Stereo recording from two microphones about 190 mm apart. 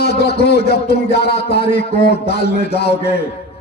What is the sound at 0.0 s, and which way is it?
A man's voice, 60° left (ahead or behind).